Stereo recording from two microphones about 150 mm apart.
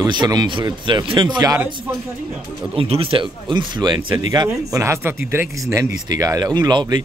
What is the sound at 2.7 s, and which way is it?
Speech, 40° right (ahead or behind).